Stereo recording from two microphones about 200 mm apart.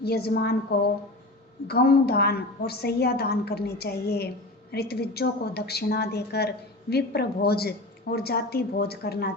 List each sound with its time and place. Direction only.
0.0 s a woman's voice: 50° left (ahead or behind)